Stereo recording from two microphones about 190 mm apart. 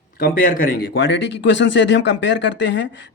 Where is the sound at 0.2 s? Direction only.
50° left (ahead or behind).